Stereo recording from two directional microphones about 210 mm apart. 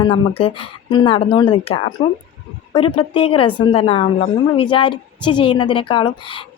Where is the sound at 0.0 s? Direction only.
25° left (ahead or behind).